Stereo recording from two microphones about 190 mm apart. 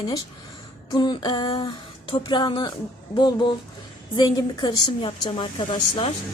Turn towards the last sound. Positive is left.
turn(degrees=30)  # may be behind; listen again after turning